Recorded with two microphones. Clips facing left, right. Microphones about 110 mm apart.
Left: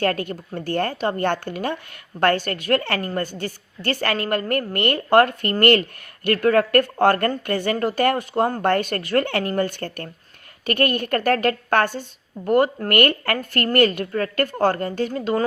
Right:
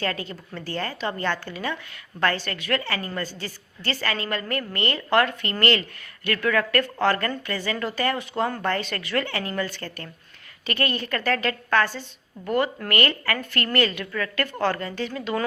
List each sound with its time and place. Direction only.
0.0 s a woman's voice: 55° left (ahead or behind)